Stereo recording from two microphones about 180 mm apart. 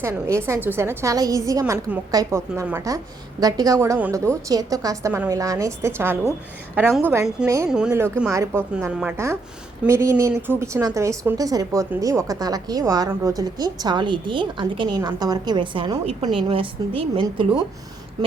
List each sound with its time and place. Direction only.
0.0 s a woman's voice: 15° right (ahead or behind)
7.7 s a woman's voice: 5° right (ahead or behind); by 17.4 s 30° right (ahead or behind)